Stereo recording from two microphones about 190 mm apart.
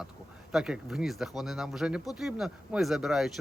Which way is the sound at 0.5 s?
5° right (ahead or behind).